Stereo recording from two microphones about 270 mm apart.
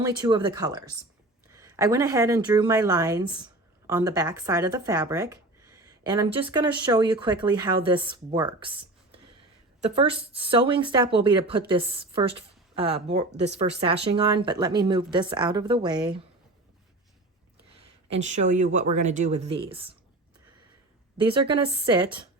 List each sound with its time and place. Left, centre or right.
0.0 s speech: centre
18.3 s speech: right
21.2 s speech: centre